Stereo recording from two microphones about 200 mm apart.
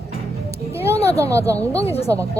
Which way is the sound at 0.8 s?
15° right (ahead or behind).